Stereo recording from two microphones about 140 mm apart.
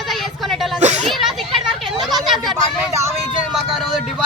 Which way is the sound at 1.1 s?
Centre (ahead or behind).